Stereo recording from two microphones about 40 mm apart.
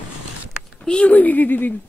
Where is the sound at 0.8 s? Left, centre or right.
Left.